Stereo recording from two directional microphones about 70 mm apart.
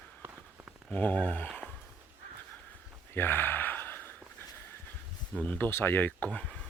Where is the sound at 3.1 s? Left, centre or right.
Left.